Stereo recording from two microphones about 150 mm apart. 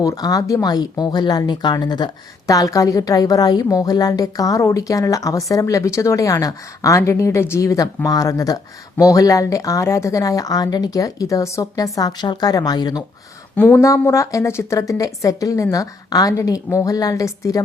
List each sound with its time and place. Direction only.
0.0 s a woman's voice: 25° left (ahead or behind)
13.6 s speech: 10° left (ahead or behind)
13.8 s a woman's voice: 20° left (ahead or behind)